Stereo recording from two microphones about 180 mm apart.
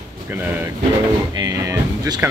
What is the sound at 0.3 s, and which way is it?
Speech, 10° right (ahead or behind).